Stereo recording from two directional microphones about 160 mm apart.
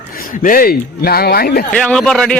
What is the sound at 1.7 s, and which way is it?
Speech, 5° left (ahead or behind).